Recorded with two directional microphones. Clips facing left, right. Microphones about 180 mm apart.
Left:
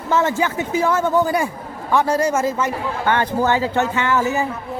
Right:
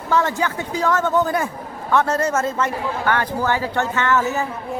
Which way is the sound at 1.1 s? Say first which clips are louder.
Left 2 dB; centre (ahead or behind).